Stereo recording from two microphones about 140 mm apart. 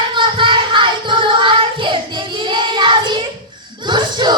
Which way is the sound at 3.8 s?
35° right (ahead or behind).